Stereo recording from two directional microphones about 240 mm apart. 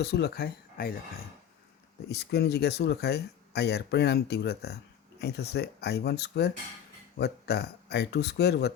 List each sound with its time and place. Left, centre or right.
0.0 s speech: left
2.0 s speech: left